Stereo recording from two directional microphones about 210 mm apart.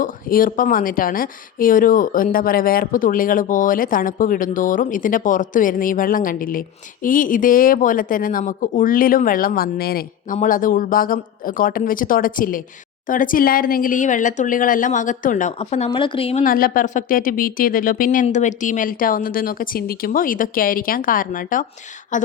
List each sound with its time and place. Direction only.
0.0 s speech: 40° left (ahead or behind)